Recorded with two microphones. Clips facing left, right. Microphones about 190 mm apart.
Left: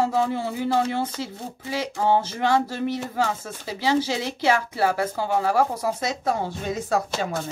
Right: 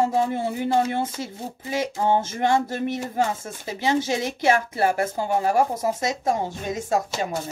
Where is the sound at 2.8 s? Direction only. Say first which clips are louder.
Right 1 dB; 20° right (ahead or behind).